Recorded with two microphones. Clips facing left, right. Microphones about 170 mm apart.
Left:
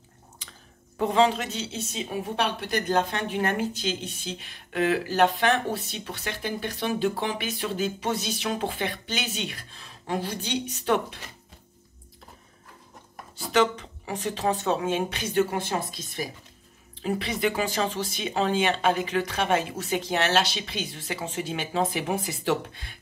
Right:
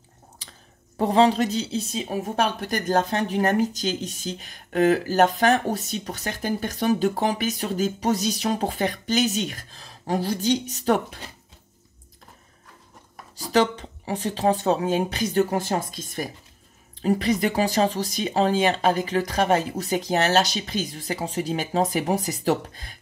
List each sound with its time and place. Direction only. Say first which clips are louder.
0.4 s a sound: even; 35° right (ahead or behind)
0.9 s a woman's voice: right 3 dB; 35° right (ahead or behind)
13.4 s a woman's voice: right 2 dB; 35° right (ahead or behind)